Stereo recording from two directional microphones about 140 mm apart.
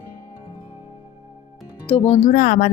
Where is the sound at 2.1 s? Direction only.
75° left (ahead or behind).